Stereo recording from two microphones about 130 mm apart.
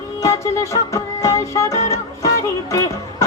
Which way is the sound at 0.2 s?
25° left (ahead or behind).